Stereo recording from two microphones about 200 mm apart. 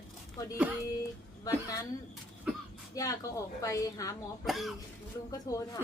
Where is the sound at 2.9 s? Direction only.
15° left (ahead or behind).